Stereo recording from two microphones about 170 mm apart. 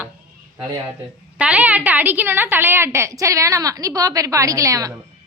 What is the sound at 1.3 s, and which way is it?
A woman's voice, 5° right (ahead or behind).